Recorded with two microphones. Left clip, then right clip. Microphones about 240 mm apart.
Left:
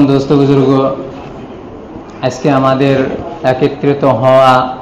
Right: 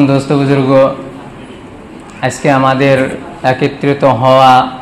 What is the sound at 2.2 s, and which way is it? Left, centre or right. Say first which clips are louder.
Speech: right 1 dB; right.